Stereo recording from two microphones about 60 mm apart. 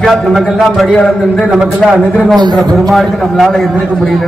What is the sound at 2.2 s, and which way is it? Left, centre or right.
A man's voice, centre.